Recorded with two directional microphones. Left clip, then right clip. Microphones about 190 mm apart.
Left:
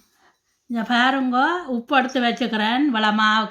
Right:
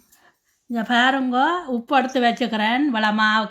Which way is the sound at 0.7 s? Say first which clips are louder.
Right 1 dB; 20° right (ahead or behind).